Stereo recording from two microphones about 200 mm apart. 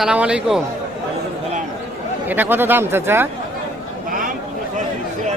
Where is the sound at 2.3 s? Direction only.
10° right (ahead or behind).